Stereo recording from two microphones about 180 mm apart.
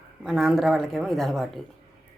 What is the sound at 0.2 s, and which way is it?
Speech, centre (ahead or behind).